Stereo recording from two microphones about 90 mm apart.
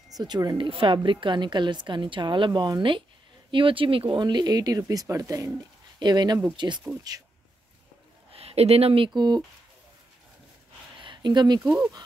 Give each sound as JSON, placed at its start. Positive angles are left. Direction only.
{"t": 0.2, "sound": "speech", "side_deg": -50}
{"t": 0.6, "sound": "a woman's voice", "side_deg": -80}
{"t": 3.5, "sound": "speech", "side_deg": -75}
{"t": 5.9, "sound": "a woman's voice", "side_deg": -55}
{"t": 8.3, "sound": "speech", "side_deg": -90}
{"t": 9.1, "sound": "speech", "side_deg": -50}
{"t": 11.0, "sound": "a sound", "side_deg": -60}